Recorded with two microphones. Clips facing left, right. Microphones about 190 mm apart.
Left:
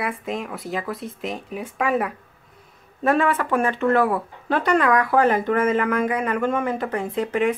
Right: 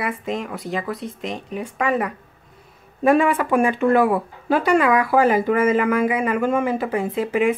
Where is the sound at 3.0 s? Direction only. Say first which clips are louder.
Right 3 dB; 10° right (ahead or behind).